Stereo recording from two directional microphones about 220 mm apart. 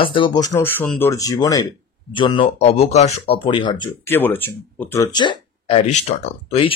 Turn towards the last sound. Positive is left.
turn(degrees=30)  # may be behind; listen again after turning